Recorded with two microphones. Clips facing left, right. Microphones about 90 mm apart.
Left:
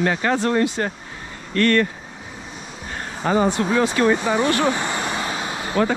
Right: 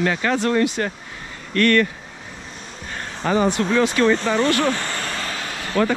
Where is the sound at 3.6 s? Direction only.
15° left (ahead or behind).